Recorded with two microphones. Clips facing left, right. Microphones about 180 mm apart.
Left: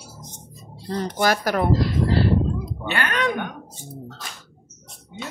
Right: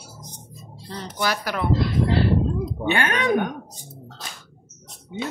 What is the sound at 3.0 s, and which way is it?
Speech, 45° right (ahead or behind).